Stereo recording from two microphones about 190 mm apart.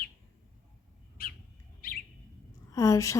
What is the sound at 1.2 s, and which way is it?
Bird, 50° left (ahead or behind).